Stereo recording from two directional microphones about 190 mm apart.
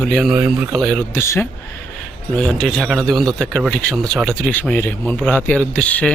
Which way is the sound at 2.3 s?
5° left (ahead or behind).